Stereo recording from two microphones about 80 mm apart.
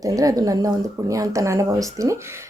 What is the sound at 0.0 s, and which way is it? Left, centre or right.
Speech, right.